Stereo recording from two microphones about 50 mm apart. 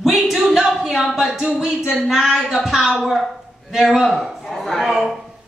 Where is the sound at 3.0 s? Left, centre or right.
Centre.